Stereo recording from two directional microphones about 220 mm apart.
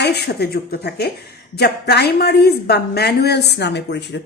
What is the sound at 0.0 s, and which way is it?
A woman's voice, 50° left (ahead or behind).